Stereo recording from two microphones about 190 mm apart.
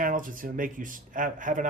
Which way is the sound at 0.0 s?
45° right (ahead or behind).